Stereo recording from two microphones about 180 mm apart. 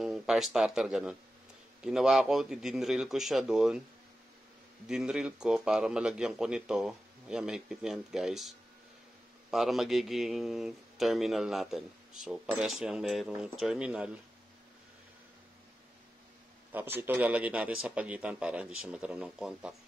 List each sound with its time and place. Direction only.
0.0 s speech: centre (ahead or behind)
4.8 s speech: 5° right (ahead or behind)
16.7 s a man's voice: 10° right (ahead or behind)